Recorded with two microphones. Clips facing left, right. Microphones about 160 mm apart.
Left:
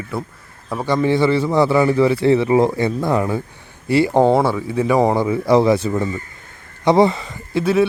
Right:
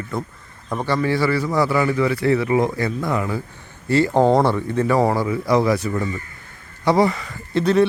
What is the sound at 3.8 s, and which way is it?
A man's voice, 15° left (ahead or behind).